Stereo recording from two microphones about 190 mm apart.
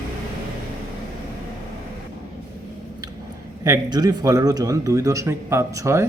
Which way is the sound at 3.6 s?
20° right (ahead or behind).